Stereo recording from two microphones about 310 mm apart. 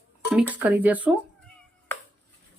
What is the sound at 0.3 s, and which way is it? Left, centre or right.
Speech, centre.